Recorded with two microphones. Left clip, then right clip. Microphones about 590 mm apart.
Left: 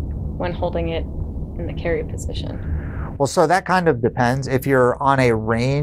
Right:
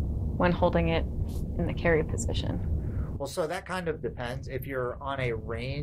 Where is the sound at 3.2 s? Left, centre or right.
Left.